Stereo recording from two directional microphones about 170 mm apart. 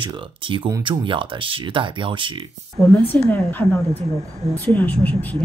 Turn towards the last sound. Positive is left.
turn(degrees=10)  # may be behind; listen again after turning